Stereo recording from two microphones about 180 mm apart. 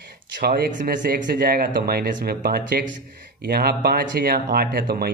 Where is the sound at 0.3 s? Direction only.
55° right (ahead or behind).